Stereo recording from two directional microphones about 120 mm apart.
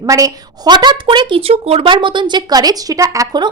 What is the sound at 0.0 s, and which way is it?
A woman's voice, 30° right (ahead or behind).